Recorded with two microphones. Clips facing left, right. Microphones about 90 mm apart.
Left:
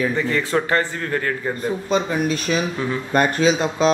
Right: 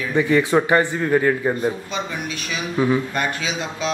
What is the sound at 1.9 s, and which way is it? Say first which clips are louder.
Speech: left 7 dB; 40° left (ahead or behind).